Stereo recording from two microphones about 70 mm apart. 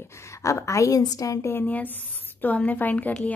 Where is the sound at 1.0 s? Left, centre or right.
Left.